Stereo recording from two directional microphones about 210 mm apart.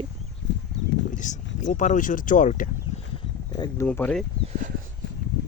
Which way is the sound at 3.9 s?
5° left (ahead or behind).